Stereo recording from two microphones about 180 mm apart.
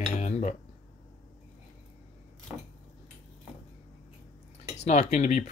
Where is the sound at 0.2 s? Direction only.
40° left (ahead or behind).